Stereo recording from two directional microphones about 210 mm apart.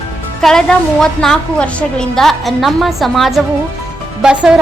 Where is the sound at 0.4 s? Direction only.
Centre (ahead or behind).